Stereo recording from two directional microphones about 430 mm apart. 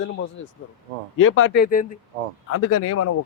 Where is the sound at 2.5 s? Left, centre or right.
Left.